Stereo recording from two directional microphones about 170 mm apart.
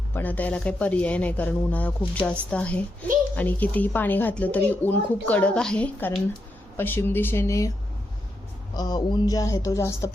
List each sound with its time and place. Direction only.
0.1 s a woman's voice: 10° left (ahead or behind)
8.7 s speech: 25° left (ahead or behind)